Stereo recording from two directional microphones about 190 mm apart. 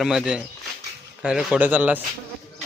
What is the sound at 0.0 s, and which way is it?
A man's voice, 5° right (ahead or behind).